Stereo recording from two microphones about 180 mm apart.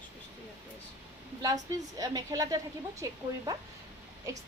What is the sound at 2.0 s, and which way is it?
A woman's voice, 20° right (ahead or behind).